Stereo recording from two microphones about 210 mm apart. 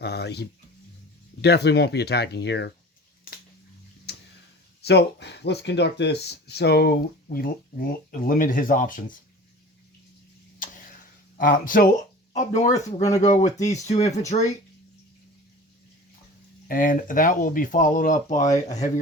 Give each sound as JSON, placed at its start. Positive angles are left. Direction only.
{"t": 0.0, "sound": "a sound", "side_deg": 50}
{"t": 1.4, "sound": "speech", "side_deg": 50}
{"t": 4.1, "sound": "tick-tock", "side_deg": 50}
{"t": 4.8, "sound": "speech", "side_deg": 55}
{"t": 10.6, "sound": "tick-tock", "side_deg": 40}
{"t": 11.3, "sound": "speech", "side_deg": 40}
{"t": 16.6, "sound": "speech", "side_deg": 40}